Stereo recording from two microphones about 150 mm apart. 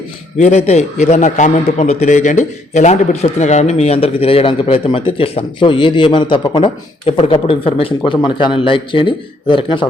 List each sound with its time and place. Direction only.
0.3 s a man's voice: 50° left (ahead or behind)